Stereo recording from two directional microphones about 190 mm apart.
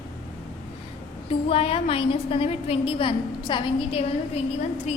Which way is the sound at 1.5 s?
30° left (ahead or behind).